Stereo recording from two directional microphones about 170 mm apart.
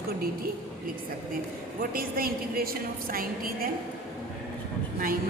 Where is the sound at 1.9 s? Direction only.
60° right (ahead or behind).